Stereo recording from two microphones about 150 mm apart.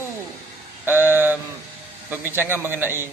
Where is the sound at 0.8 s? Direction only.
15° right (ahead or behind).